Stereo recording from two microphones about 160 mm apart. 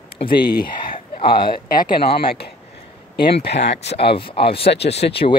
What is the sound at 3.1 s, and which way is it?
Speech, 90° left.